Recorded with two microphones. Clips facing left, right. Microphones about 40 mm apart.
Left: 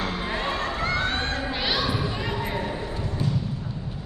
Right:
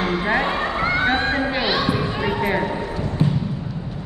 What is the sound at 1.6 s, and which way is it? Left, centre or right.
Basketball bounce, centre.